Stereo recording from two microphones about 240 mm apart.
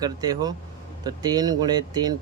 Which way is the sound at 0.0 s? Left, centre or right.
Centre.